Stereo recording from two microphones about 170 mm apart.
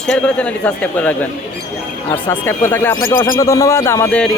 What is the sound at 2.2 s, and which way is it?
Speech, 15° left (ahead or behind).